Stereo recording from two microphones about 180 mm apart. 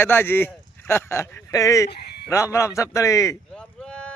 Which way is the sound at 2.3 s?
15° left (ahead or behind).